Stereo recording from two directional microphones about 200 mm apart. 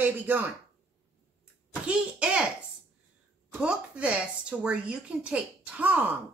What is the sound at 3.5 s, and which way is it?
Speech, 5° right (ahead or behind).